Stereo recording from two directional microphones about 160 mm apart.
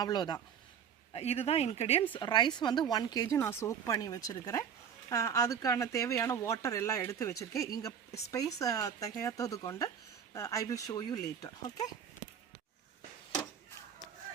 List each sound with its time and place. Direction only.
0.0 s speech: 25° left (ahead or behind)
1.1 s speech: 40° left (ahead or behind)
2.1 s speech: 30° left (ahead or behind)